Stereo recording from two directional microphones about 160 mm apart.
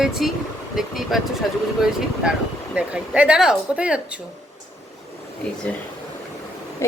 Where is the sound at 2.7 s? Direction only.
5° right (ahead or behind).